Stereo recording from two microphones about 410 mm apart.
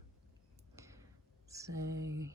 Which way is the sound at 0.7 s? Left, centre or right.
Centre.